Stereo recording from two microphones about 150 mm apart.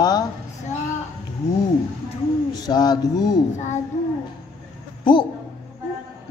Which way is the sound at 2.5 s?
25° left (ahead or behind).